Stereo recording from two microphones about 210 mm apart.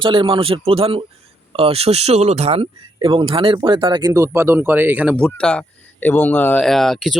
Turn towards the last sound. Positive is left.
turn(degrees=0)  # may be behind; listen again after turning